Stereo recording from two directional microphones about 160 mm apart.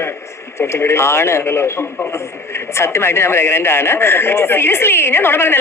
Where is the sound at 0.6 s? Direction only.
15° left (ahead or behind).